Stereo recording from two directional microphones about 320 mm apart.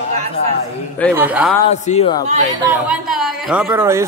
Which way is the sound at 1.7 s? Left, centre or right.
Centre.